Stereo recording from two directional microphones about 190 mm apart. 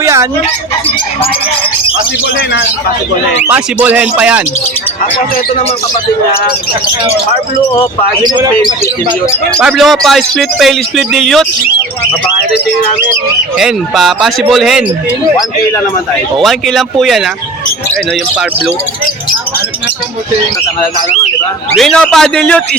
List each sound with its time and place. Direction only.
0.0 s chicken: 15° right (ahead or behind)
3.4 s speech: 10° right (ahead or behind)
8.2 s speech: 20° right (ahead or behind)
9.2 s speech: 10° left (ahead or behind)
9.6 s speech: centre (ahead or behind)
13.6 s speech: centre (ahead or behind)
16.4 s speech: centre (ahead or behind)
21.8 s speech: 5° left (ahead or behind)